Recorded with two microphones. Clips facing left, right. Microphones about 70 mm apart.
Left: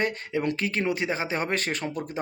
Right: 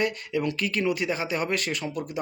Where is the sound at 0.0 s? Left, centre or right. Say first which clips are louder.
Even; left.